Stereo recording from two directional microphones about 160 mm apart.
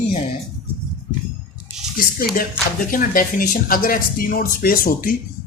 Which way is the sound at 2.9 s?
60° left (ahead or behind).